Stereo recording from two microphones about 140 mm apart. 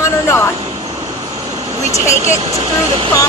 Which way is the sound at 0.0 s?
20° left (ahead or behind).